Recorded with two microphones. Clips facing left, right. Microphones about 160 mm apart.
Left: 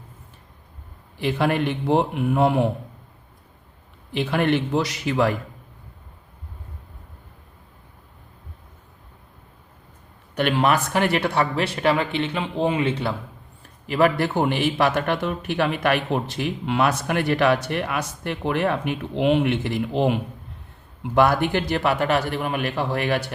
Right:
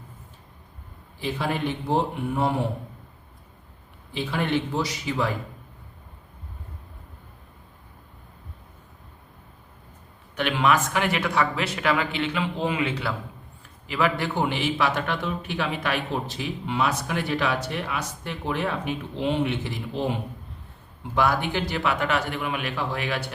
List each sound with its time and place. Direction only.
1.2 s a man's voice: 65° left (ahead or behind)
4.1 s a man's voice: 60° left (ahead or behind)
10.3 s speech: 40° left (ahead or behind)
13.8 s a man's voice: 45° left (ahead or behind); by 20.1 s 65° left (ahead or behind)
21.2 s a man's voice: 55° left (ahead or behind)